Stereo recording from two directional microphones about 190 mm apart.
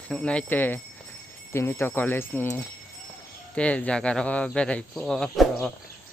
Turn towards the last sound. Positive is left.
turn(degrees=5)  # may be behind; listen again after turning